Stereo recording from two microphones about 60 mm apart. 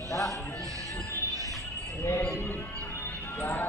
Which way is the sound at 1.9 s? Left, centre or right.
Left.